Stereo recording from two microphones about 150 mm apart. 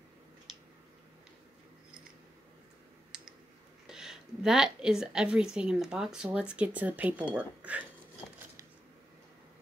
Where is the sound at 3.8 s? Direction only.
5° right (ahead or behind).